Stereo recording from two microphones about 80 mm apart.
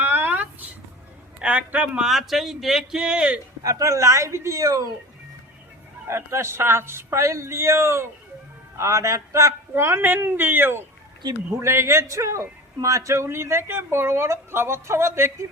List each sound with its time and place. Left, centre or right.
0.0 s a sound: right
1.4 s a man's voice: centre
2.0 s speech: centre
3.6 s a man's voice: right
6.1 s a man's voice: right